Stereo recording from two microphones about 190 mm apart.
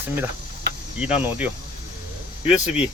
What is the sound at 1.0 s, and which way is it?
Speech, 10° right (ahead or behind).